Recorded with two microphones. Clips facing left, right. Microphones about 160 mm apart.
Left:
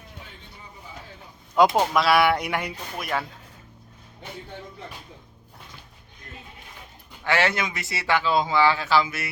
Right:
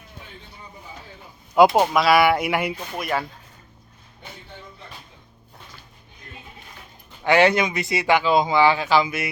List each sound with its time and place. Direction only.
1.5 s speech: 5° right (ahead or behind)
7.3 s speech: 20° right (ahead or behind)